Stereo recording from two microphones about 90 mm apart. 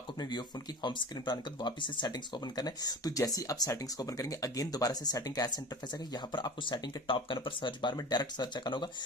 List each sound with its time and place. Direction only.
0.2 s speech: 55° left (ahead or behind)